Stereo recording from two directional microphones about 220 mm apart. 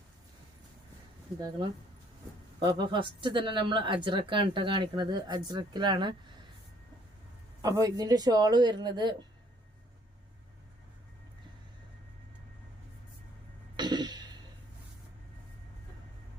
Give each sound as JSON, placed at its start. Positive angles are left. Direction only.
{"t": 1.4, "sound": "a woman's voice", "side_deg": -20}
{"t": 7.6, "sound": "a woman's voice", "side_deg": -15}
{"t": 13.7, "sound": "music", "side_deg": -20}